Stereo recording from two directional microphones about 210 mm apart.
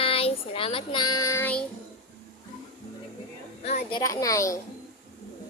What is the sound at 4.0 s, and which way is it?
Speech, 15° left (ahead or behind).